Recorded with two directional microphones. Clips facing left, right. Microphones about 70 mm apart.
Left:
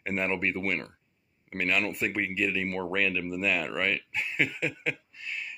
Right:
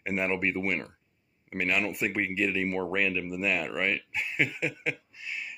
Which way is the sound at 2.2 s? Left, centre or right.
Right.